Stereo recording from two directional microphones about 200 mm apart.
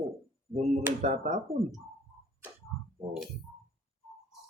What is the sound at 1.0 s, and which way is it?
Speech, 35° right (ahead or behind).